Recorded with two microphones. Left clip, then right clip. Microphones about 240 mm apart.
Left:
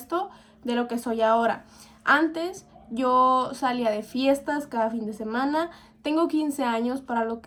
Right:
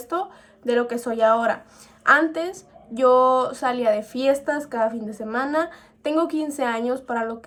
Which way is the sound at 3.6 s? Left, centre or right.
Left.